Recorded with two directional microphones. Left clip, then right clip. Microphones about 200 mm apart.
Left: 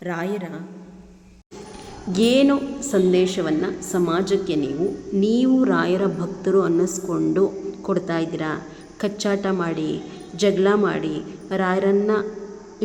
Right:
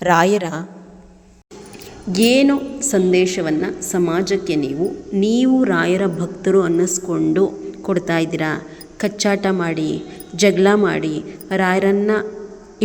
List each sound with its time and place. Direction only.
0.0 s a woman's voice: 45° right (ahead or behind)
2.1 s a woman's voice: 25° right (ahead or behind)